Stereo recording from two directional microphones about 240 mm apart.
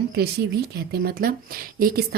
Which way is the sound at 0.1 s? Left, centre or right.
Right.